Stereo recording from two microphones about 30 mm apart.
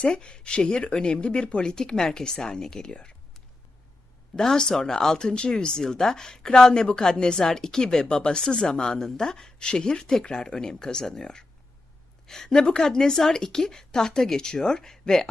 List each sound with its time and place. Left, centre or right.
0.2 s speech: left
1.7 s a woman's voice: centre
4.4 s a woman's voice: left